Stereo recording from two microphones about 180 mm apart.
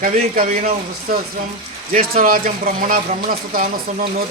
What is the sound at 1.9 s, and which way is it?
Speech, 50° right (ahead or behind).